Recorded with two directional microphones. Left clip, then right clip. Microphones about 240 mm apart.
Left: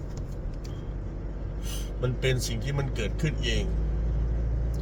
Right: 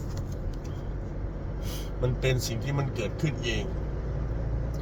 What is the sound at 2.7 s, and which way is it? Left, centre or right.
Speech, centre.